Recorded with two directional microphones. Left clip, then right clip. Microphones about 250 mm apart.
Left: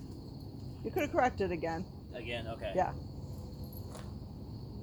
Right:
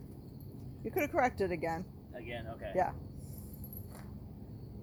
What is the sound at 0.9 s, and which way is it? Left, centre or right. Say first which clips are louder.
Speech: left 1 dB; right.